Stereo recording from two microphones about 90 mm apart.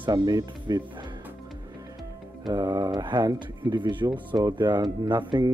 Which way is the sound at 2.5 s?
50° right (ahead or behind).